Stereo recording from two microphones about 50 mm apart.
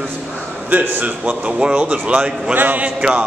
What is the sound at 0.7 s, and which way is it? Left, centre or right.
A man's voice, right.